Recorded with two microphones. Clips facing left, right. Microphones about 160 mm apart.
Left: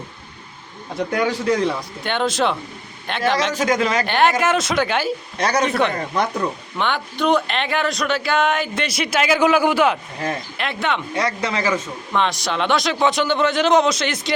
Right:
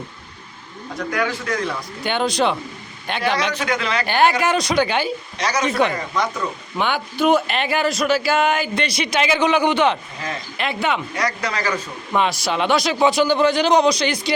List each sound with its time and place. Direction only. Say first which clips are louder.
0.9 s speech: left 3 dB; 30° left (ahead or behind)
2.0 s speech: right 1 dB; centre (ahead or behind)
3.5 s a man's voice: left 4 dB; 40° left (ahead or behind)
4.0 s speech: even; centre (ahead or behind)
5.4 s speech: left 3 dB; 55° left (ahead or behind)
5.6 s speech: even; centre (ahead or behind)
11.1 s speech: left 2 dB; 25° left (ahead or behind)
12.1 s speech: right 1 dB; 5° right (ahead or behind)